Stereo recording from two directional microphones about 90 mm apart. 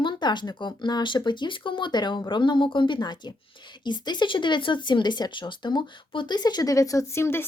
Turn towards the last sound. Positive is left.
turn(degrees=30)  # may be behind; listen again after turning